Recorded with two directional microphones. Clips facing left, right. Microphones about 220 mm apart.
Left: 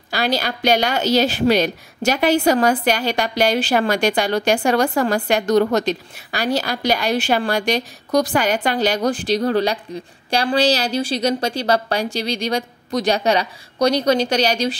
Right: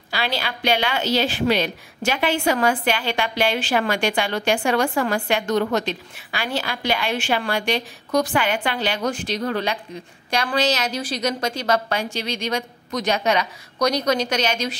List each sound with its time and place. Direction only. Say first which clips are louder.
0.1 s a woman's voice: left 5 dB; 40° left (ahead or behind)